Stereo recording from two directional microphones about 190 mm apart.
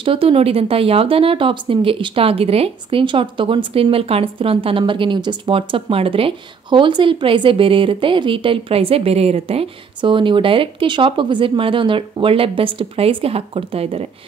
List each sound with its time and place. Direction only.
0.0 s speech: 30° right (ahead or behind)